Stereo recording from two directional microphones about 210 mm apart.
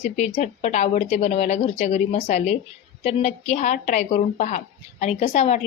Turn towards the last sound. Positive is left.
turn(degrees=30)  # may be behind; listen again after turning